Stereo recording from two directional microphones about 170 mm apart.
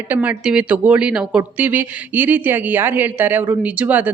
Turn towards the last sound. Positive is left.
turn(degrees=-10)  # may be behind; listen again after turning